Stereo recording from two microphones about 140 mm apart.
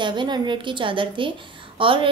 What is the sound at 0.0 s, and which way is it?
A woman's voice, 35° right (ahead or behind).